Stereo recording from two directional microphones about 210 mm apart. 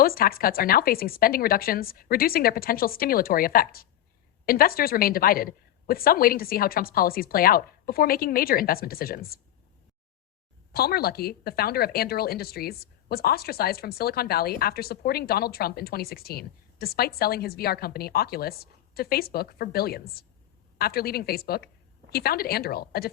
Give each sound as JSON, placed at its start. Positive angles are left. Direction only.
{"t": 0.0, "sound": "a woman's voice", "side_deg": 45}
{"t": 10.7, "sound": "a woman's voice", "side_deg": 45}